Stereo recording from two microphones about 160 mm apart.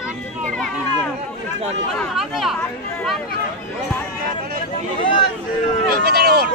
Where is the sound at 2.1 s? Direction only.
Centre (ahead or behind).